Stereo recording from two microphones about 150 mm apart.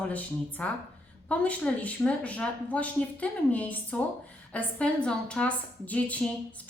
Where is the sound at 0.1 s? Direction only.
10° left (ahead or behind).